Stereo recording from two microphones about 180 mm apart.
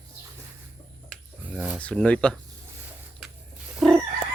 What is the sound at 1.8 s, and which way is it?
Speech, 5° left (ahead or behind).